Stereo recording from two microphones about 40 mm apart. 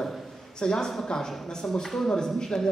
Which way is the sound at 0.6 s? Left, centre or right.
Centre.